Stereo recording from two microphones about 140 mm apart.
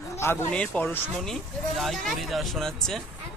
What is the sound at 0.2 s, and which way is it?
Speech, 15° left (ahead or behind).